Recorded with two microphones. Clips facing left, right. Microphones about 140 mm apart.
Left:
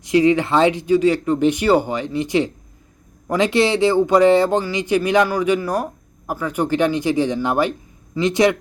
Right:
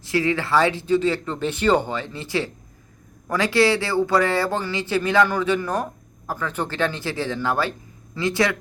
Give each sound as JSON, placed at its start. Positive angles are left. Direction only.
{"t": 0.0, "sound": "speech", "side_deg": 20}